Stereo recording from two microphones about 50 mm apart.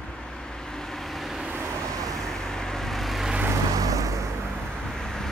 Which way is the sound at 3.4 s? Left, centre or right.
Right.